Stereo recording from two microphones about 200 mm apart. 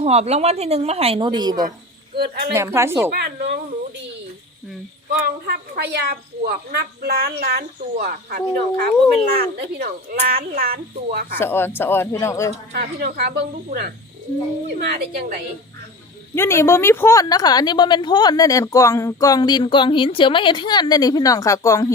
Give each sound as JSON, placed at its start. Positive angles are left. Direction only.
{"t": 0.0, "sound": "a woman's voice", "side_deg": -30}
{"t": 2.1, "sound": "a woman's voice", "side_deg": -50}
{"t": 2.5, "sound": "speech", "side_deg": -15}
{"t": 3.1, "sound": "speech", "side_deg": -55}
{"t": 5.2, "sound": "a woman's voice", "side_deg": -55}
{"t": 11.3, "sound": "speech", "side_deg": 10}
{"t": 12.7, "sound": "a woman's voice", "side_deg": -50}
{"t": 16.3, "sound": "a woman's voice", "side_deg": 15}